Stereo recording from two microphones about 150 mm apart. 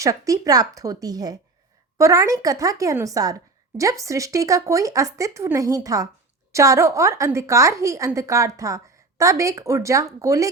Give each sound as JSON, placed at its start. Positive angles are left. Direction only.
{"t": 0.0, "sound": "a woman's voice", "side_deg": -20}